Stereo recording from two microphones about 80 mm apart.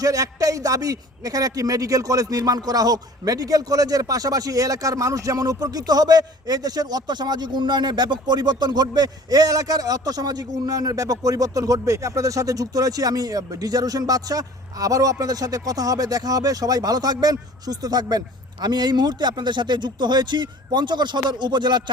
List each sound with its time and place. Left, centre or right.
0.0 s a man's voice: right